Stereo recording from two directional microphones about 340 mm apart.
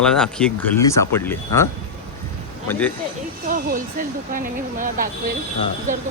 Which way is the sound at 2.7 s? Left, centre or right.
Centre.